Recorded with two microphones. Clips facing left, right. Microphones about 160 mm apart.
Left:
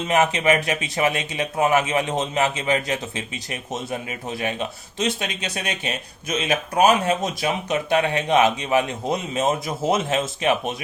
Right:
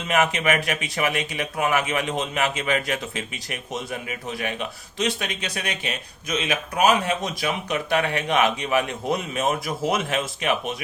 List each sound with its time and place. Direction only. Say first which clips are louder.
0.0 s speech: left 2 dB; 25° left (ahead or behind)